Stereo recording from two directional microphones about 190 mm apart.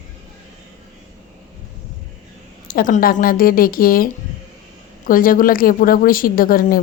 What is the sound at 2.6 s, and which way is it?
A woman's voice, 45° left (ahead or behind).